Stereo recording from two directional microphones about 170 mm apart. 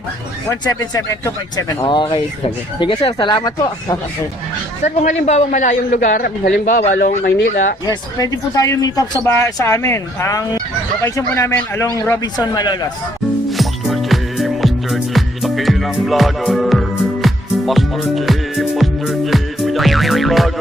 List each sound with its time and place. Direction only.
0.6 s speech: 20° left (ahead or behind)
5.0 s a man's voice: 45° left (ahead or behind)
7.9 s speech: 20° left (ahead or behind)
13.5 s music: centre (ahead or behind)